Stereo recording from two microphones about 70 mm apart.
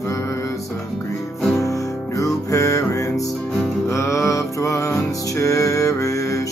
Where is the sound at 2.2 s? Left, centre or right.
Left.